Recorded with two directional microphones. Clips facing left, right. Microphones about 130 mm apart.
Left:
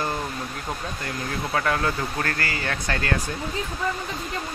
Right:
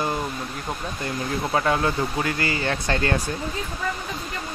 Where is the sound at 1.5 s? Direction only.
20° right (ahead or behind).